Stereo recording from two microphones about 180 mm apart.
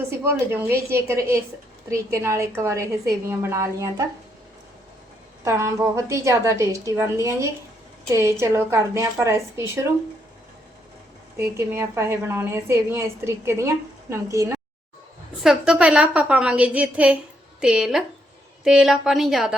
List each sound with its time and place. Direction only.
0.1 s a woman's voice: 15° right (ahead or behind)
5.5 s a woman's voice: 15° right (ahead or behind)
11.3 s a woman's voice: 15° right (ahead or behind)
15.4 s a woman's voice: 5° right (ahead or behind)